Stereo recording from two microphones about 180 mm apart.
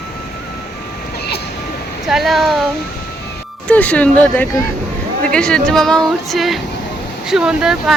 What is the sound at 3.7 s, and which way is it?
Speech, 5° left (ahead or behind).